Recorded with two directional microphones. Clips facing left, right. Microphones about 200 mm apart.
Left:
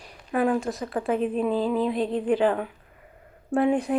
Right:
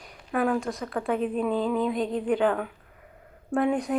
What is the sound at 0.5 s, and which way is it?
Speech, centre (ahead or behind).